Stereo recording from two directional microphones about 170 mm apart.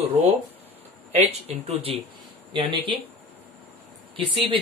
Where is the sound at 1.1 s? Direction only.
35° right (ahead or behind).